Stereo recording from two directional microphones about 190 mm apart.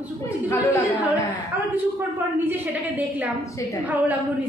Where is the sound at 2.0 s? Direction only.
10° right (ahead or behind).